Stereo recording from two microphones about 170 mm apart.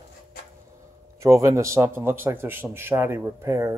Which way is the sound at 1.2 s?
15° right (ahead or behind).